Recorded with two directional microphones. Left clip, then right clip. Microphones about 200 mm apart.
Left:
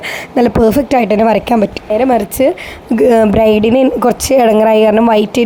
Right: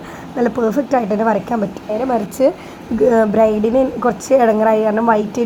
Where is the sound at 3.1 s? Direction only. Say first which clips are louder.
Left 4 dB; 45° left (ahead or behind).